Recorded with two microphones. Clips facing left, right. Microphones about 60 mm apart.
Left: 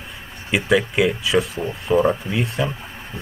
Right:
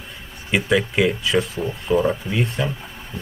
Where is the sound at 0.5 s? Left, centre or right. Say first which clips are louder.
Left 1 dB; centre.